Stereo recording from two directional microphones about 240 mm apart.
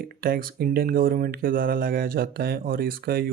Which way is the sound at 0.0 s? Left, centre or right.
Right.